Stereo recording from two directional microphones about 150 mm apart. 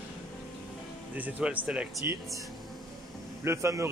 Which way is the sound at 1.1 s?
10° right (ahead or behind).